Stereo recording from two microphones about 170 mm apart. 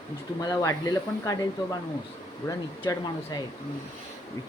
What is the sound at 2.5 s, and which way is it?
Speech, 20° left (ahead or behind).